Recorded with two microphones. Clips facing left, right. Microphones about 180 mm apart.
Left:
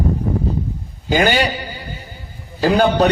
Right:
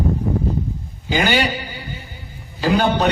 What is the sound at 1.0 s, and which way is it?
A man's voice, 45° left (ahead or behind).